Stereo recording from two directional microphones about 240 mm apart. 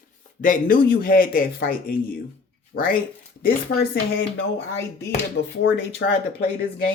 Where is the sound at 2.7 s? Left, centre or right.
Left.